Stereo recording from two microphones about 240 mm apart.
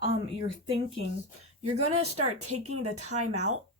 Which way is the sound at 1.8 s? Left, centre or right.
Right.